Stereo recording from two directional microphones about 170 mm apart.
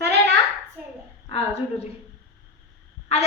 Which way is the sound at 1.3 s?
35° left (ahead or behind).